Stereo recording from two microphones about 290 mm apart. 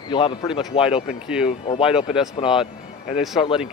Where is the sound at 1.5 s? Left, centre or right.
Centre.